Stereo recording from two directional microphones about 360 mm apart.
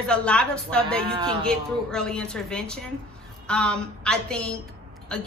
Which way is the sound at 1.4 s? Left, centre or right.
Centre.